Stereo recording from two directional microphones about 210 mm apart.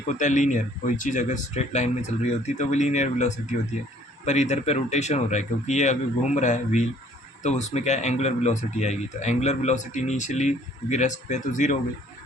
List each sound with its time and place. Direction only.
0.1 s speech: 35° left (ahead or behind)